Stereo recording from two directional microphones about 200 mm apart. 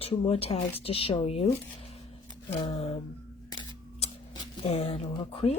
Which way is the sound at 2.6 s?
30° left (ahead or behind).